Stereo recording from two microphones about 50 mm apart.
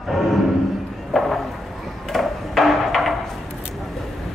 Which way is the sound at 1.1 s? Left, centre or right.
Centre.